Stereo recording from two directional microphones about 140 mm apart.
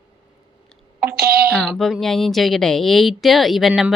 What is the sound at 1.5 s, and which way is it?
A woman's voice, centre (ahead or behind).